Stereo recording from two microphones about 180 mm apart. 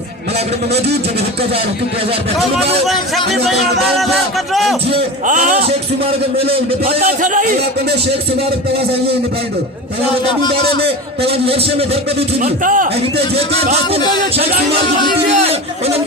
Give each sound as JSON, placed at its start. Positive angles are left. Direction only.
{"t": 2.8, "sound": "music", "side_deg": 0}
{"t": 5.2, "sound": "a man's voice", "side_deg": -45}
{"t": 7.0, "sound": "speech", "side_deg": -50}
{"t": 11.3, "sound": "a man's voice", "side_deg": -30}
{"t": 12.4, "sound": "speech", "side_deg": -45}